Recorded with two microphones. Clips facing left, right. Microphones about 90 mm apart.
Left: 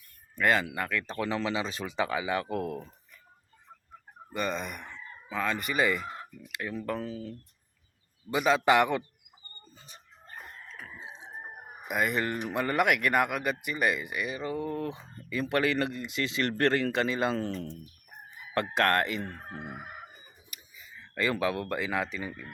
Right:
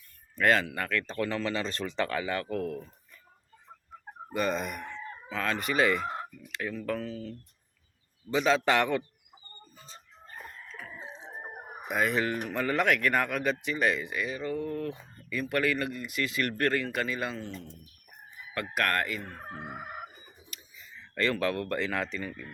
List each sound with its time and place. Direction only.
0.3 s speech: 5° left (ahead or behind); by 2.9 s 25° left (ahead or behind)
4.4 s fowl: centre (ahead or behind)
4.9 s speech: 10° left (ahead or behind)
6.7 s speech: 20° left (ahead or behind)
8.3 s speech: 10° left (ahead or behind)
9.7 s chicken: 15° left (ahead or behind)
11.0 s a sound: 15° left (ahead or behind)
11.9 s fowl: 5° left (ahead or behind)
12.5 s speech: 10° left (ahead or behind)
17.3 s speech: 40° left (ahead or behind)
18.5 s speech: 25° left (ahead or behind)
20.5 s speech: 5° left (ahead or behind)